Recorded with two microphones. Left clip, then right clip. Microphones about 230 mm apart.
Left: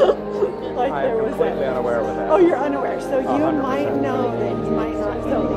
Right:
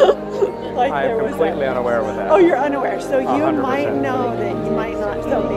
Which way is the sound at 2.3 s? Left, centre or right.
Right.